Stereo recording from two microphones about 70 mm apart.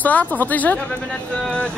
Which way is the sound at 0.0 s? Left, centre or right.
Left.